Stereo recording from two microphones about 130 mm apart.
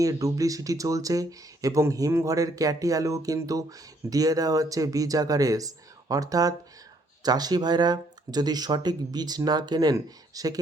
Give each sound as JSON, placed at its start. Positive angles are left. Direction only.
{"t": 0.0, "sound": "speech", "side_deg": -25}